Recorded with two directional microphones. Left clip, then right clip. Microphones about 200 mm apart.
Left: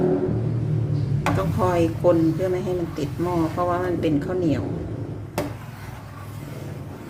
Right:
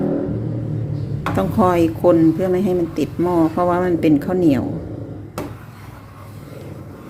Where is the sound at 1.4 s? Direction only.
40° right (ahead or behind).